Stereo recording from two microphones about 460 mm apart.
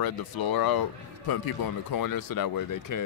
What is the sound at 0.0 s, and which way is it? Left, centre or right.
Speech, left.